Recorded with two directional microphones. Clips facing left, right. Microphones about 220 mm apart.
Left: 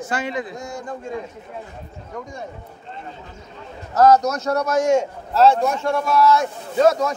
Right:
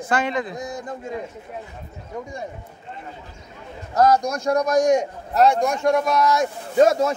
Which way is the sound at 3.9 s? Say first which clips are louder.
Left 3 dB; 10° right (ahead or behind).